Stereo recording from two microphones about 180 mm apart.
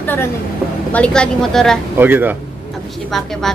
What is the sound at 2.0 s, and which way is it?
Speech, 10° right (ahead or behind).